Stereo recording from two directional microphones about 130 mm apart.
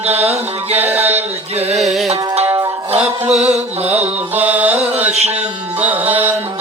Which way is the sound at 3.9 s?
10° right (ahead or behind).